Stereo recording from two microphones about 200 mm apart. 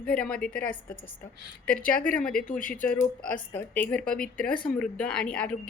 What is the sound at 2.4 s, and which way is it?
Speech, 40° left (ahead or behind).